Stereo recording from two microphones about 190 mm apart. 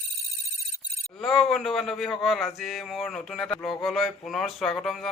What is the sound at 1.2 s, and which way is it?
Speech, centre (ahead or behind).